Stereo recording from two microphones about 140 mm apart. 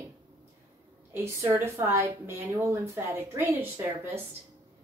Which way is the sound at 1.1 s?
20° right (ahead or behind).